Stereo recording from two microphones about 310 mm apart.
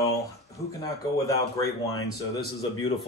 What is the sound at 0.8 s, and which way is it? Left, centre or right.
Speech, centre.